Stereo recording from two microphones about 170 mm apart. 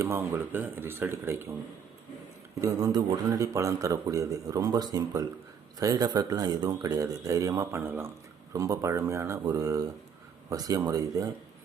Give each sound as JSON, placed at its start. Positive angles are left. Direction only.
{"t": 0.0, "sound": "speech", "side_deg": -15}
{"t": 2.6, "sound": "a man's voice", "side_deg": -20}